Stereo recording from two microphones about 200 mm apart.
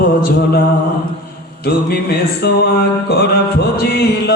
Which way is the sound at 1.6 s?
55° left (ahead or behind).